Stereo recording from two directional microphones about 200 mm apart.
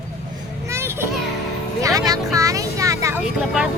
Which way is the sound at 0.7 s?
10° right (ahead or behind).